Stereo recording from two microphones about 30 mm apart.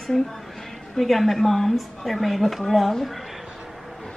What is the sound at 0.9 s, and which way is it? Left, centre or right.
Speech, centre.